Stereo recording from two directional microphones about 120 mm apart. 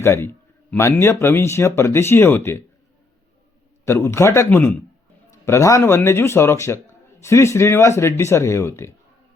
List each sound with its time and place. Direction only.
0.0 s speech: 20° left (ahead or behind)
3.8 s a man's voice: 25° left (ahead or behind)